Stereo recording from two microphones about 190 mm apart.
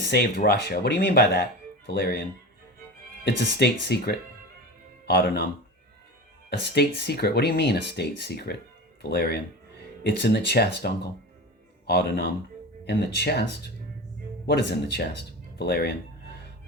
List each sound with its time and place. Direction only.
0.0 s speech: 55° left (ahead or behind)
3.2 s speech: 60° left (ahead or behind)
6.6 s speech: 60° left (ahead or behind)
14.4 s speech: 60° left (ahead or behind)